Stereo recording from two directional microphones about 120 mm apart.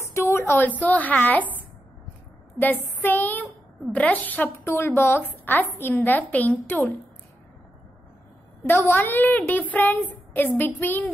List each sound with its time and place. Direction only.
0.1 s a woman's voice: 20° left (ahead or behind)
2.6 s a woman's voice: 15° left (ahead or behind)
8.6 s a woman's voice: 15° left (ahead or behind)